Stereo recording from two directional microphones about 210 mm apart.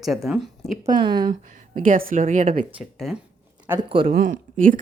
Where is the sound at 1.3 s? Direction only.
40° right (ahead or behind).